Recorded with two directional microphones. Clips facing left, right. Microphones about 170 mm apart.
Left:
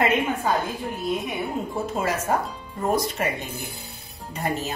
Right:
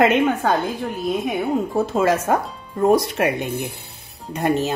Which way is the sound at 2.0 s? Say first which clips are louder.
Right 7 dB; 90° right.